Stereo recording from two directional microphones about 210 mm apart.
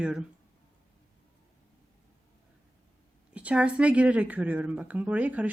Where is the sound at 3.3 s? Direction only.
5° right (ahead or behind).